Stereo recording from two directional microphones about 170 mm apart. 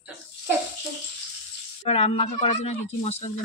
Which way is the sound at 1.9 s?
40° left (ahead or behind).